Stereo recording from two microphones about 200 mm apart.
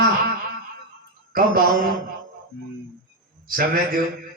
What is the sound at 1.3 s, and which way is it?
Speech, 45° right (ahead or behind).